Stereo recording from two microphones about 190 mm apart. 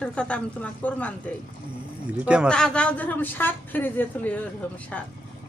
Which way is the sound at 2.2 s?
5° right (ahead or behind).